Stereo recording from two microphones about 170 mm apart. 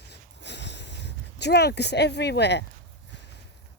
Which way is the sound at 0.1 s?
90° left.